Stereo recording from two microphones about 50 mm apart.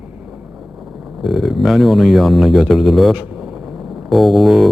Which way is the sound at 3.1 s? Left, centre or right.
Centre.